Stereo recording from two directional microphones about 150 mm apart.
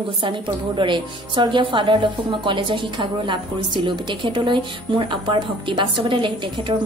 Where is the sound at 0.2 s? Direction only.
35° right (ahead or behind).